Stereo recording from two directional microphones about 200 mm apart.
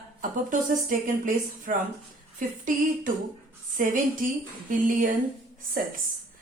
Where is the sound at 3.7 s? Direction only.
40° right (ahead or behind).